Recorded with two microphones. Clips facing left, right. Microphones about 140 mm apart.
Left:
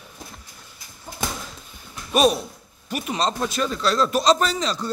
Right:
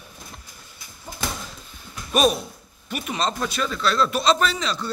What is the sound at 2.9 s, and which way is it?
A man's voice, 35° left (ahead or behind).